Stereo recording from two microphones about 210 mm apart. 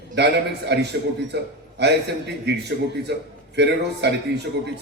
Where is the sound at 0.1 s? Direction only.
55° right (ahead or behind).